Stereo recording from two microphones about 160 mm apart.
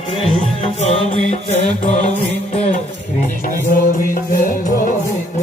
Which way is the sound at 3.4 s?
60° left (ahead or behind).